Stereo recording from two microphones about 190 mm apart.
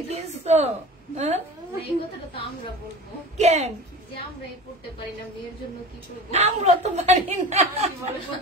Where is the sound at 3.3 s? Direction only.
35° right (ahead or behind).